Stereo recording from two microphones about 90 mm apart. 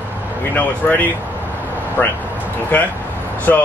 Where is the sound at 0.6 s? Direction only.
15° left (ahead or behind).